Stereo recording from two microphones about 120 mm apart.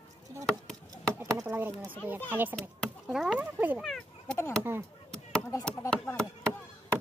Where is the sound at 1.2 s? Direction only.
25° right (ahead or behind).